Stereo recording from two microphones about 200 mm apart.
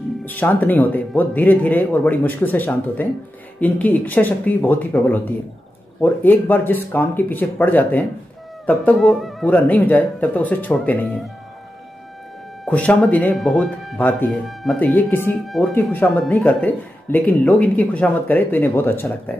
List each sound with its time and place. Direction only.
0.2 s speech: 10° left (ahead or behind)
12.6 s speech: 5° left (ahead or behind)